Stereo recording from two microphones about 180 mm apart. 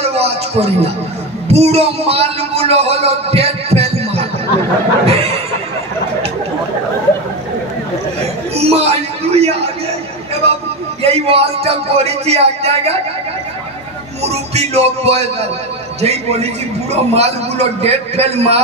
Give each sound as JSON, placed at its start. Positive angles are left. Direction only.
{"t": 0.0, "sound": "a man's voice", "side_deg": -35}
{"t": 8.2, "sound": "a sound", "side_deg": -35}
{"t": 11.0, "sound": "a man's voice", "side_deg": -35}
{"t": 14.2, "sound": "a man's voice", "side_deg": -35}